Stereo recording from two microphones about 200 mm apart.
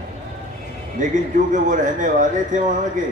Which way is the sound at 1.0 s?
40° right (ahead or behind).